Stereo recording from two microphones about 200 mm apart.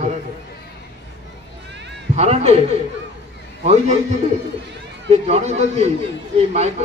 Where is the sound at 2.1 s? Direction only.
35° right (ahead or behind).